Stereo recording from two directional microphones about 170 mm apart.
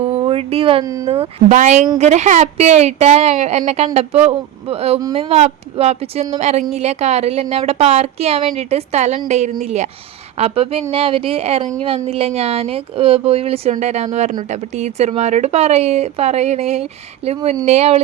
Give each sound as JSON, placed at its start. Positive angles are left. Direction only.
{"t": 0.0, "sound": "a sound", "side_deg": -40}
{"t": 1.0, "sound": "speech", "side_deg": -35}
{"t": 1.5, "sound": "a woman's voice", "side_deg": -45}